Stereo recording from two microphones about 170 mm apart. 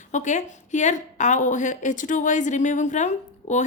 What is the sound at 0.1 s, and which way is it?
A woman's voice, 45° left (ahead or behind).